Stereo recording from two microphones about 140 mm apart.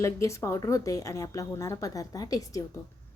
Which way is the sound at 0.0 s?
20° left (ahead or behind).